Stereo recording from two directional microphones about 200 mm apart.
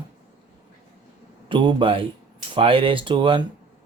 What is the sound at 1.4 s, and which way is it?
A man's voice, 25° right (ahead or behind).